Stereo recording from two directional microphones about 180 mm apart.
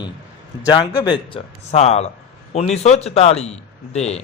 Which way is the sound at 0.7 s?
25° left (ahead or behind).